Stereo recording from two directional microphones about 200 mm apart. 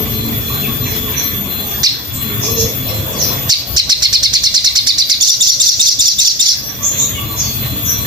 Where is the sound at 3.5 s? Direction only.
20° right (ahead or behind).